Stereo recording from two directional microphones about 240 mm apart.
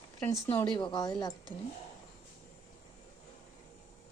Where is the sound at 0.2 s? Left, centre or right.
Centre.